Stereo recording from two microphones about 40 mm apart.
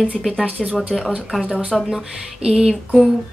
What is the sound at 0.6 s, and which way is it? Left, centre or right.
Speech, centre.